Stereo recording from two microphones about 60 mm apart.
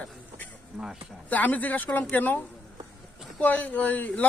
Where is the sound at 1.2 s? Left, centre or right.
Left.